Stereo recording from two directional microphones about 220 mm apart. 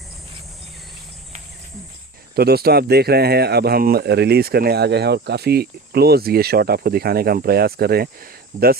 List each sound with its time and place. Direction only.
2.3 s speech: 45° right (ahead or behind)